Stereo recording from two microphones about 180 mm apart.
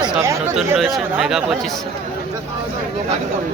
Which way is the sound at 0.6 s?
Centre (ahead or behind).